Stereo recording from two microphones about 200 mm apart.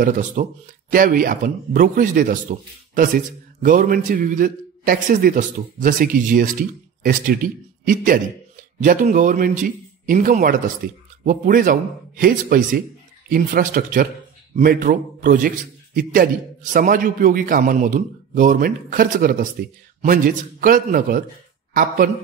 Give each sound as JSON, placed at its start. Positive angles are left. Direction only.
{"t": 0.0, "sound": "a man's voice", "side_deg": -40}